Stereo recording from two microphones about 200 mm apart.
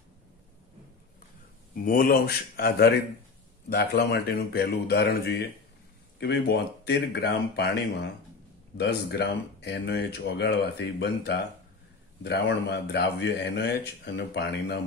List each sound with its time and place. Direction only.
1.9 s speech: 50° left (ahead or behind)